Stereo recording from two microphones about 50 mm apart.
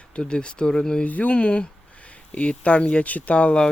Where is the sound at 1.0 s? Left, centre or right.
Left.